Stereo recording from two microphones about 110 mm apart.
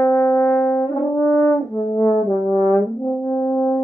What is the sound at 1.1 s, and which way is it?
French horn, 25° left (ahead or behind).